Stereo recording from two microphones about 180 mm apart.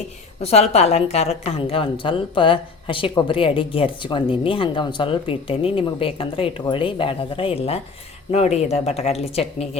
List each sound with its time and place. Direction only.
0.3 s a woman's voice: 35° left (ahead or behind)